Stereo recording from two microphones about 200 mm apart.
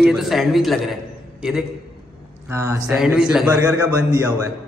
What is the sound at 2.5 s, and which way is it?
A man's voice, 15° right (ahead or behind).